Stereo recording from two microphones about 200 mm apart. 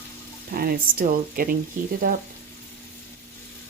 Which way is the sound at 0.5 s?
50° right (ahead or behind).